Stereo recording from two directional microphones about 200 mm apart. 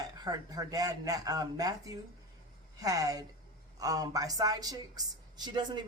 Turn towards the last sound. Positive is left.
turn(degrees=-20)  # may be behind; listen again after turning